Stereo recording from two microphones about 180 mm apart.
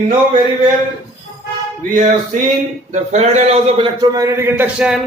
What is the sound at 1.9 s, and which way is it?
Music, 45° right (ahead or behind).